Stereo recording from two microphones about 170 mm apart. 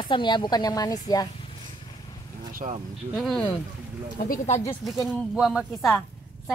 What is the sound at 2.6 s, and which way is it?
Speech, 45° right (ahead or behind).